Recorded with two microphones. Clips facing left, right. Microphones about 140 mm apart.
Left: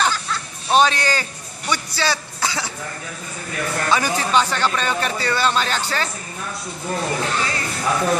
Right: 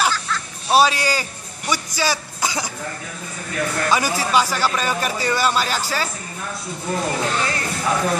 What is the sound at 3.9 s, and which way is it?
Speech, 10° right (ahead or behind).